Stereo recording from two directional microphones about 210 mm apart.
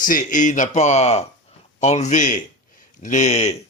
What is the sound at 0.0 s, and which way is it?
Speech, 40° left (ahead or behind).